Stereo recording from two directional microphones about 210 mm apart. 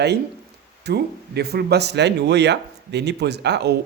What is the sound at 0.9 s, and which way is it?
Speech, 50° right (ahead or behind).